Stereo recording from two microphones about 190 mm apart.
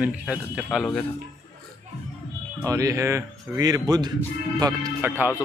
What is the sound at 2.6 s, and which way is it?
Speech, 15° right (ahead or behind).